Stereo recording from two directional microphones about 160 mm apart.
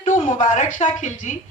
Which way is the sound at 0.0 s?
50° left (ahead or behind).